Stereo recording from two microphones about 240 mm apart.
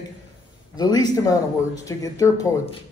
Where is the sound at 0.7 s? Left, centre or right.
Centre.